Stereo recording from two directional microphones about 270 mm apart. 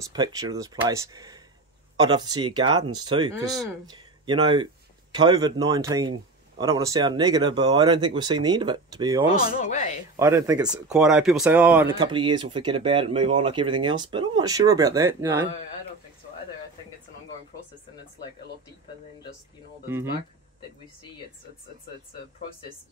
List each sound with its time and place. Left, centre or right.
0.0 s speech: centre
9.4 s speech: left
10.1 s speech: centre